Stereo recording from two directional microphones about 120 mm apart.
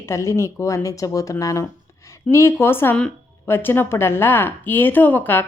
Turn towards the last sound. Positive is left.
turn(degrees=15)  # may be behind; listen again after turning